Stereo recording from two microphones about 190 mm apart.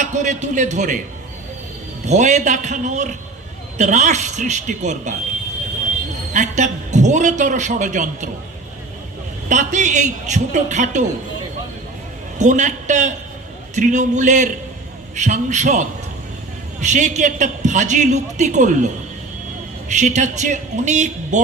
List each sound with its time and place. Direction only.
0.0 s a man's voice: 40° right (ahead or behind)
2.0 s a man's voice: 40° right (ahead or behind)
6.3 s a man's voice: 40° right (ahead or behind)
9.5 s a man's voice: 40° right (ahead or behind)
12.4 s a man's voice: 40° right (ahead or behind)
16.8 s a man's voice: 40° right (ahead or behind)
19.9 s a man's voice: 40° right (ahead or behind)